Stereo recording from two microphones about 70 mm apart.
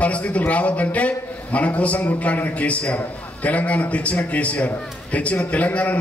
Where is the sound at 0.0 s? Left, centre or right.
Centre.